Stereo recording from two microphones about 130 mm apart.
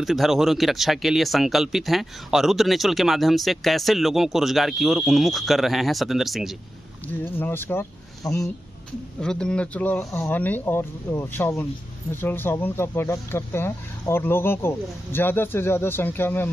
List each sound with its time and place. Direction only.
0.0 s speech: centre (ahead or behind)
7.1 s speech: 15° left (ahead or behind)
9.2 s speech: 5° left (ahead or behind)